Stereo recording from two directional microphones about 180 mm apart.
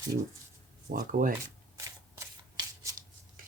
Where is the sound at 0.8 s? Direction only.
50° right (ahead or behind).